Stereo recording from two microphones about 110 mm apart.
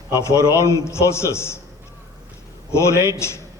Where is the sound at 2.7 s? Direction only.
25° left (ahead or behind).